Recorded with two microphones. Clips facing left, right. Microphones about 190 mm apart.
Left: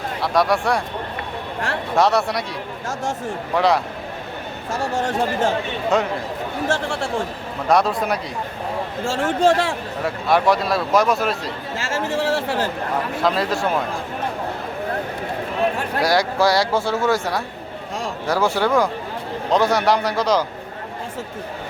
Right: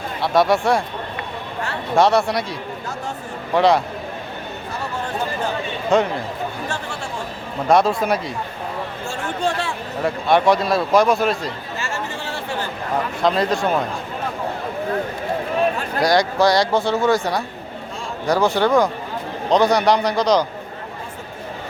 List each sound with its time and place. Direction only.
0.2 s a man's voice: centre (ahead or behind)
2.0 s a man's voice: centre (ahead or behind)
3.5 s a man's voice: centre (ahead or behind)
4.7 s speech: 90° left
5.9 s a man's voice: centre (ahead or behind)
6.7 s speech: 90° left
7.7 s a man's voice: centre (ahead or behind)
9.0 s speech: 90° left
10.0 s a man's voice: centre (ahead or behind)
11.8 s speech: 90° left
13.2 s a man's voice: 5° left (ahead or behind)
16.0 s a man's voice: 5° left (ahead or behind)